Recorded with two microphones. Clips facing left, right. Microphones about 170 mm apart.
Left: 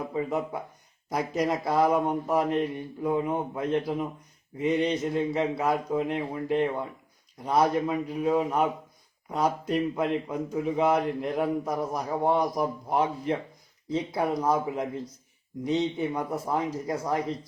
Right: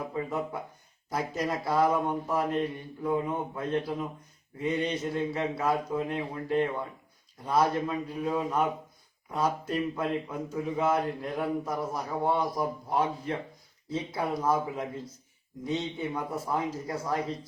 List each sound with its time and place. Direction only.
0.1 s speech: 20° left (ahead or behind)
7.4 s speech: 20° left (ahead or behind)